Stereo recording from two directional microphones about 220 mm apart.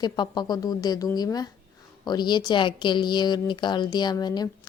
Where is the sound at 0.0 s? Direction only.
20° left (ahead or behind).